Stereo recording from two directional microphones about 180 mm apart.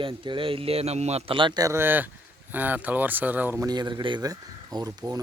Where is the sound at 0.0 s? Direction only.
30° right (ahead or behind); by 3.7 s 10° right (ahead or behind).